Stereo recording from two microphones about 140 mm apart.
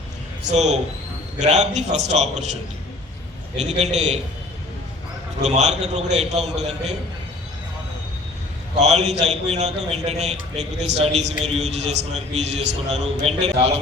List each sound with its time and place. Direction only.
0.4 s a man's voice: 55° right (ahead or behind)
3.6 s a man's voice: 55° right (ahead or behind)
5.4 s a man's voice: 55° right (ahead or behind)
8.8 s a man's voice: 55° right (ahead or behind)